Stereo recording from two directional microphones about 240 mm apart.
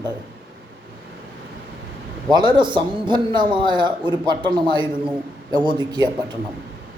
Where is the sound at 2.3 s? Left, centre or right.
Centre.